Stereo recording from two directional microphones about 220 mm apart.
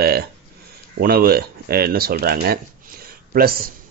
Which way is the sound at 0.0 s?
45° right (ahead or behind).